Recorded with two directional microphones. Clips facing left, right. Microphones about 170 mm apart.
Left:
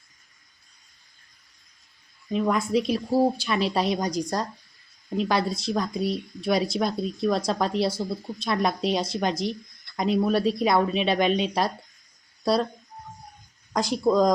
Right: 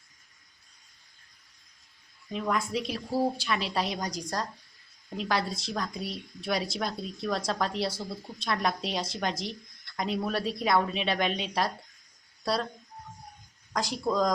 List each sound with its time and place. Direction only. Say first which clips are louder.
2.3 s speech: left 7 dB; 20° left (ahead or behind)
13.7 s speech: left 7 dB; 20° left (ahead or behind)